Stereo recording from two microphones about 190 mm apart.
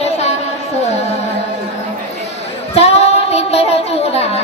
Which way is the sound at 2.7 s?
35° left (ahead or behind).